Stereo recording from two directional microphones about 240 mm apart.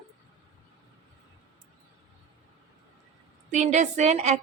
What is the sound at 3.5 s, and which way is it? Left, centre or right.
Speech, right.